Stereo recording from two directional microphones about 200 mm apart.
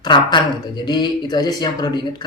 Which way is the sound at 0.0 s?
20° left (ahead or behind).